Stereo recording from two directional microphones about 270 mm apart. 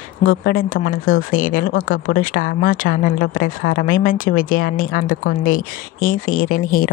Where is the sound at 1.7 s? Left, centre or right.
Left.